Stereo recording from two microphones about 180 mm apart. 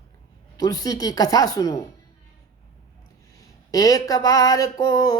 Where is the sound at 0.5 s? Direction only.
20° left (ahead or behind).